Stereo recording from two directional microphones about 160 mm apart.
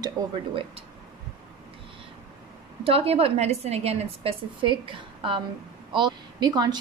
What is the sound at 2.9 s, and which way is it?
A woman's voice, 35° right (ahead or behind).